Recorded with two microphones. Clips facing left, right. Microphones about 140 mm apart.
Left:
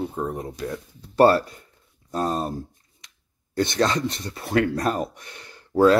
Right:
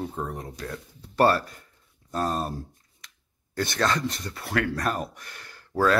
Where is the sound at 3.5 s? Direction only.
25° left (ahead or behind).